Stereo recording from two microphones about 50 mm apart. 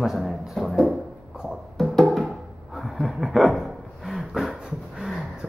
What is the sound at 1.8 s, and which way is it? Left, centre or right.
Music, centre.